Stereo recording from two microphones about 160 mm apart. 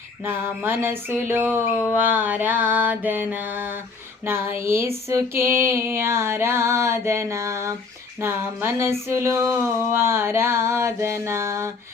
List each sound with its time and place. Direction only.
0.3 s female singing: 15° right (ahead or behind)